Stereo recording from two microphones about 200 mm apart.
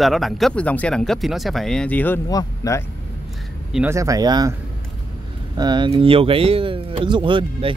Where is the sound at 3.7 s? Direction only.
10° right (ahead or behind).